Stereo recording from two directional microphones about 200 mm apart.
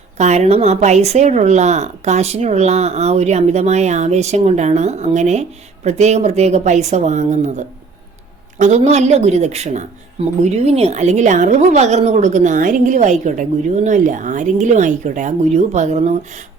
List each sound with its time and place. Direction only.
0.2 s speech: 35° right (ahead or behind)